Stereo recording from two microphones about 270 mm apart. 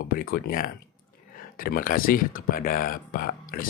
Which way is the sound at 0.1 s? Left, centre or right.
Left.